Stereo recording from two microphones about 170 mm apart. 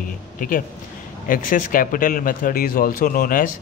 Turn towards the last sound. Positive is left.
turn(degrees=55)  # may be behind; listen again after turning